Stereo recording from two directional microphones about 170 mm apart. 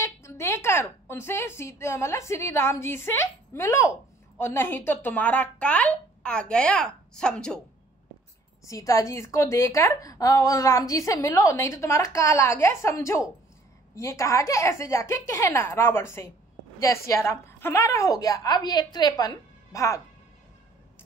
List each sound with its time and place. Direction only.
0.0 s a woman's voice: 15° left (ahead or behind)
8.6 s a woman's voice: 20° left (ahead or behind)